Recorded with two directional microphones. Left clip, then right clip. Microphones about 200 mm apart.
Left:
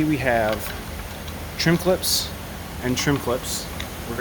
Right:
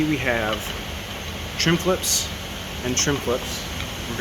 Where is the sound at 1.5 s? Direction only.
30° left (ahead or behind).